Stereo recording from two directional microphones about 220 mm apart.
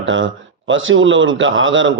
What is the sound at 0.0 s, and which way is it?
A man's voice, 60° right (ahead or behind).